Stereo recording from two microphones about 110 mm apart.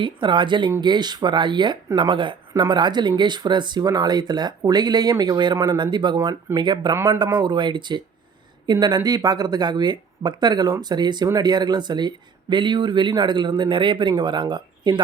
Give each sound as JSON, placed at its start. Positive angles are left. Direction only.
{"t": 0.0, "sound": "speech", "side_deg": -45}